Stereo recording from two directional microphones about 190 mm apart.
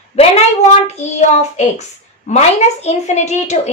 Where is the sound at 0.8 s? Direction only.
35° left (ahead or behind).